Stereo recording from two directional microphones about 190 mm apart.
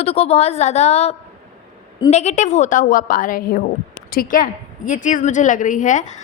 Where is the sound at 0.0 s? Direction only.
30° left (ahead or behind).